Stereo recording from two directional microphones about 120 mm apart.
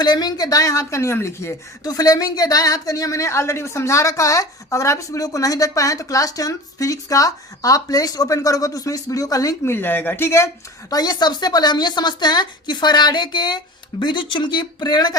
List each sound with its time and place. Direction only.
0.0 s a woman's voice: 35° left (ahead or behind)
9.7 s speech: 15° left (ahead or behind); by 15.1 s 35° left (ahead or behind)